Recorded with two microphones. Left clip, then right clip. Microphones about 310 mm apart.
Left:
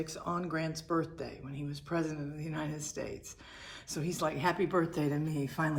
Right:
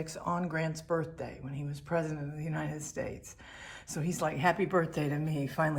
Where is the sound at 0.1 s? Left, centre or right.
Right.